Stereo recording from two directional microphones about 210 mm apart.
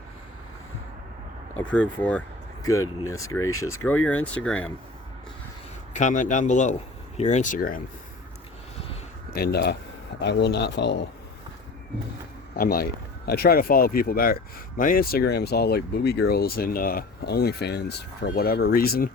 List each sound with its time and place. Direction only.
1.5 s speech: 5° left (ahead or behind)
5.9 s a man's voice: 35° left (ahead or behind)
9.3 s speech: 45° left (ahead or behind)
12.5 s speech: 45° left (ahead or behind)